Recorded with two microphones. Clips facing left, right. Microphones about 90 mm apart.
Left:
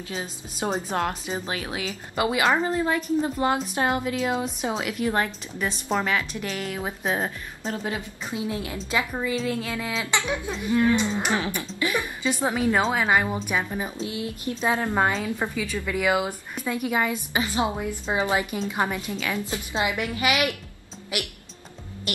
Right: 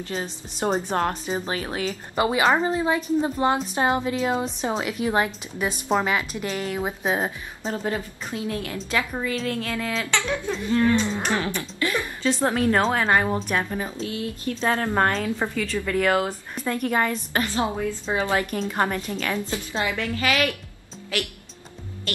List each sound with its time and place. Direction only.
0.0 s a woman's voice: 5° left (ahead or behind)
5.0 s speech: 10° right (ahead or behind)
7.9 s a woman's voice: 20° left (ahead or behind)
14.0 s a woman's voice: 20° left (ahead or behind)
22.1 s music: 15° left (ahead or behind)